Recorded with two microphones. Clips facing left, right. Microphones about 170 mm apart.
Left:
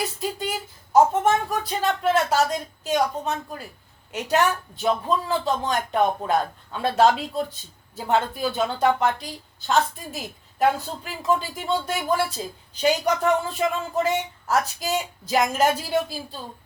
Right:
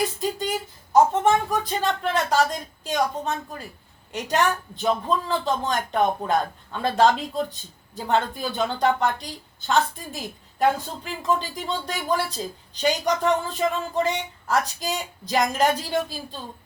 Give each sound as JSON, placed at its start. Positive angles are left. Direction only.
{"t": 0.2, "sound": "a woman's voice", "side_deg": 5}